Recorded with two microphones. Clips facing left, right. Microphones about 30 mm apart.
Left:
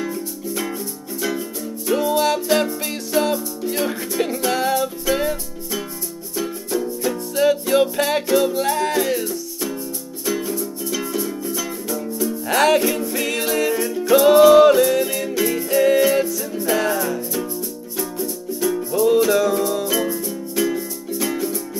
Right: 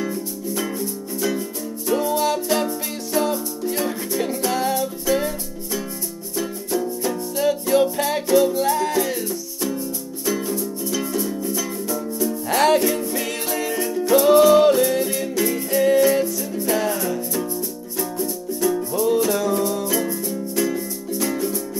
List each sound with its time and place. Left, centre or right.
0.0 s music: centre
7.3 s music: centre